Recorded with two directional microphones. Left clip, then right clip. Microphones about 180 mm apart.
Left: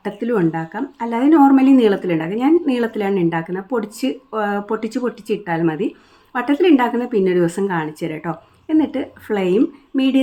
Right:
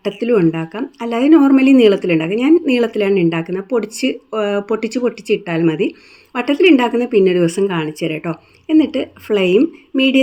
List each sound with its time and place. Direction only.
0.0 s a woman's voice: 15° right (ahead or behind)